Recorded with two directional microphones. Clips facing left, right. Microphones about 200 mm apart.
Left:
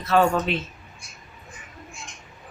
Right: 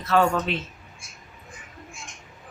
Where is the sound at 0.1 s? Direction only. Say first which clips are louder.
Left 1 dB; 20° left (ahead or behind).